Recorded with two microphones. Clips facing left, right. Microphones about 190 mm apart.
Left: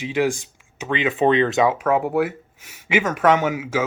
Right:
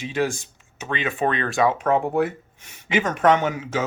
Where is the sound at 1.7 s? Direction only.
5° left (ahead or behind).